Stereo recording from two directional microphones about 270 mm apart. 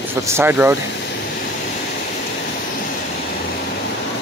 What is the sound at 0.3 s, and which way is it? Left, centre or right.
Speech, centre.